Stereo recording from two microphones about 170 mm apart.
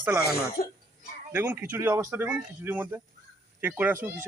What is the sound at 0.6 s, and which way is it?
Speech, 60° left (ahead or behind).